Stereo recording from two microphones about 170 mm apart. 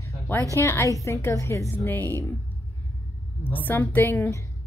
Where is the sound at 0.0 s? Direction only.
15° left (ahead or behind).